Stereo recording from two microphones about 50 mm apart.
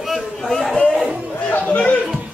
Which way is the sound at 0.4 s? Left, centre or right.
Centre.